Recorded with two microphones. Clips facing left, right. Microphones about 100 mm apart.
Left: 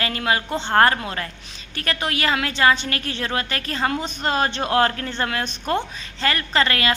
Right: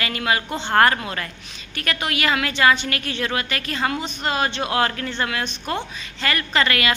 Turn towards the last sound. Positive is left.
turn(degrees=30)  # may be behind; listen again after turning